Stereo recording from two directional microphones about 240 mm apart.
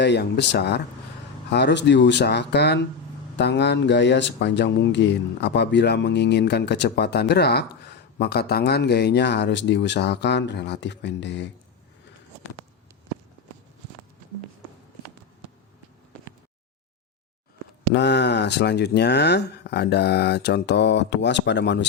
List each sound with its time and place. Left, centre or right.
0.0 s speech: left
17.9 s speech: left